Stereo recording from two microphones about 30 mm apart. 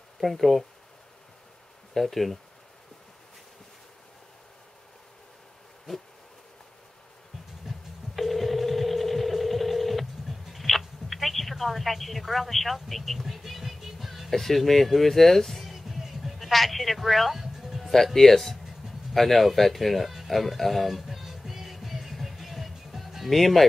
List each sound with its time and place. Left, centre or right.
0.2 s speech: centre
2.0 s speech: centre
7.7 s busy signal: centre
8.2 s telephone: centre
14.3 s speech: centre
15.7 s music: centre
16.3 s speech: centre
17.8 s speech: centre
20.2 s music: centre
23.3 s speech: centre